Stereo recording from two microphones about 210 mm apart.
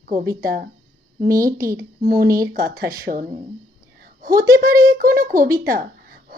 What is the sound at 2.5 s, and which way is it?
Speech, 45° right (ahead or behind).